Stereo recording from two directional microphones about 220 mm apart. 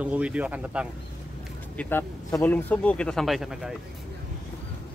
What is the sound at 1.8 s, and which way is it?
Speech, 10° left (ahead or behind).